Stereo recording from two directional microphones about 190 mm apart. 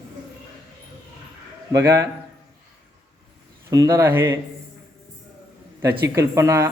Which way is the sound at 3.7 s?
20° right (ahead or behind).